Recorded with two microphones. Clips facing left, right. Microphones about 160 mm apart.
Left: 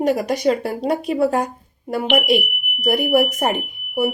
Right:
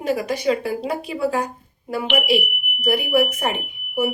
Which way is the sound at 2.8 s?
40° left (ahead or behind).